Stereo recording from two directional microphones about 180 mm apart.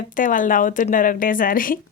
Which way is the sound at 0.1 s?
45° left (ahead or behind).